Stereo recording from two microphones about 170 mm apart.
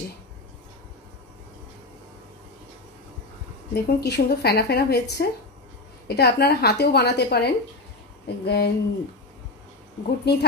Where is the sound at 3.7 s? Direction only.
75° left (ahead or behind).